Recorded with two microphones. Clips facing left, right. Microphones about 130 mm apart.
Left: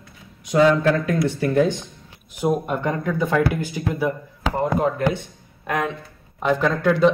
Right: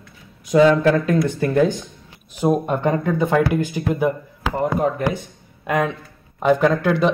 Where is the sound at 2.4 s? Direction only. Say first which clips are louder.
Right 3 dB; 30° right (ahead or behind).